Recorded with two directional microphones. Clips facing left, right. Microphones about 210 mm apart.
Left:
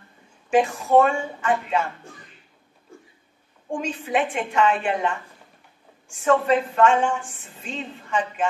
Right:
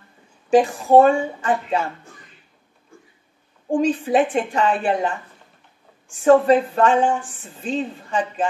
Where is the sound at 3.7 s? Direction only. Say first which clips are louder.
Right 7 dB; 35° right (ahead or behind).